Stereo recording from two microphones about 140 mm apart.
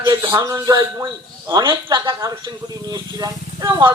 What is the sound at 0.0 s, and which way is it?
Speech, 25° right (ahead or behind).